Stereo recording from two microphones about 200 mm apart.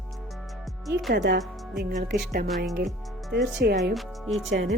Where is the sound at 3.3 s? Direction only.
60° right (ahead or behind).